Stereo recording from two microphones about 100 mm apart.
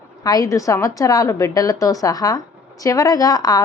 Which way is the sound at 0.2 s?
40° left (ahead or behind).